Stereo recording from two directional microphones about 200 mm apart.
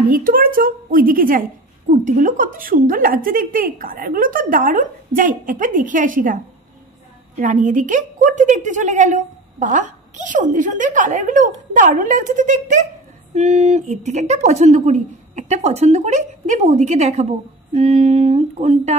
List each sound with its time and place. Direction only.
0.1 s a woman's voice: 45° right (ahead or behind)